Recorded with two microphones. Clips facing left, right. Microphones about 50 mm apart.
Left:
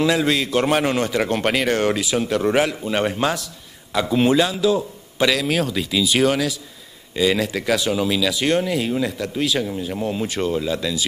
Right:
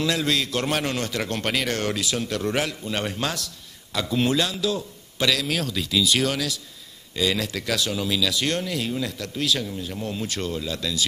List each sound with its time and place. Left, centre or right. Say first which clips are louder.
0.0 s speech: left 5 dB; centre